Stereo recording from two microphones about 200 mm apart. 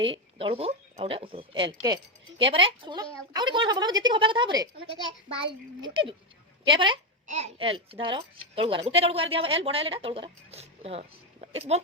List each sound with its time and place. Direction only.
0.0 s a woman's voice: 25° right (ahead or behind)